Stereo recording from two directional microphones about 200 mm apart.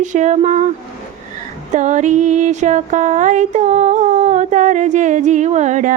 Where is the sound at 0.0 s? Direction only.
40° right (ahead or behind).